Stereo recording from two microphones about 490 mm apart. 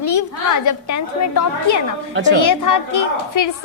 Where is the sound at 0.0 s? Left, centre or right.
Left.